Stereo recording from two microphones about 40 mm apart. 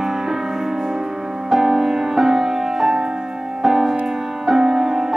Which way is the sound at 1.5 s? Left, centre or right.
Centre.